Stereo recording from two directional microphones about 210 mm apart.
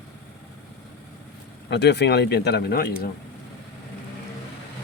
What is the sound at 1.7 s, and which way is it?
Speech, 55° left (ahead or behind).